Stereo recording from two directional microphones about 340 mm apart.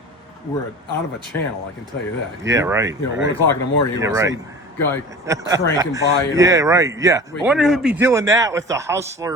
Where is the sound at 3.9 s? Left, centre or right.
Centre.